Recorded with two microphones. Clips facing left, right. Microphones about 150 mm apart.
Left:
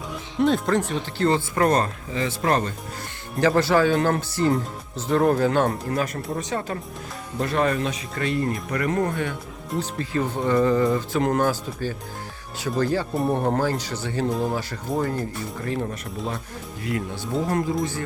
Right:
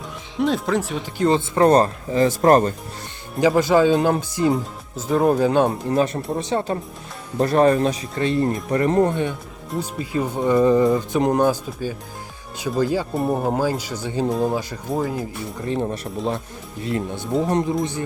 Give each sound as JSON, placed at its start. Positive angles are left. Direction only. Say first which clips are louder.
{"t": 0.3, "sound": "speech", "louder": "even", "side_deg": 0}
{"t": 1.0, "sound": "speech", "louder": "right 3 dB", "side_deg": -20}
{"t": 3.4, "sound": "speech", "louder": "right 3 dB", "side_deg": -15}
{"t": 9.8, "sound": "speech", "louder": "right 2 dB", "side_deg": -10}
{"t": 14.8, "sound": "speech", "louder": "even", "side_deg": -5}
{"t": 15.6, "sound": "speech", "louder": "right 5 dB", "side_deg": -20}